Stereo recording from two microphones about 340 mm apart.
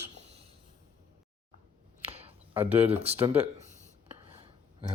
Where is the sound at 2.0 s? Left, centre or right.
Centre.